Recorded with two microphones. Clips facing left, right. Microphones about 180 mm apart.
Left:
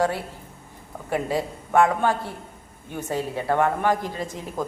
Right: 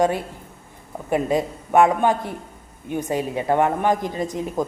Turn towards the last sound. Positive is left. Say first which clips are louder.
# right 6 dB
turn(degrees=-15)  # may be behind; listen again after turning